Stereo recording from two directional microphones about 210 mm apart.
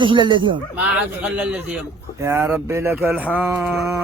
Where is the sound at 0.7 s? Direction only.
5° right (ahead or behind).